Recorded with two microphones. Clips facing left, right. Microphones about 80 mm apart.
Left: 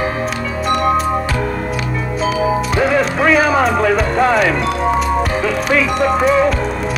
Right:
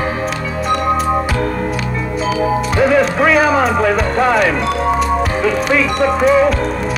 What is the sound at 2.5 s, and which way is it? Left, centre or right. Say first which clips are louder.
Speech: right 2 dB; centre.